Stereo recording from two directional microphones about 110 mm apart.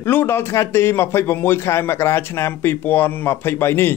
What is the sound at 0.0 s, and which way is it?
A man's voice, 20° left (ahead or behind).